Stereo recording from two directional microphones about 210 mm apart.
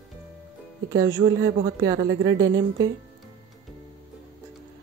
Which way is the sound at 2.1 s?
60° right (ahead or behind).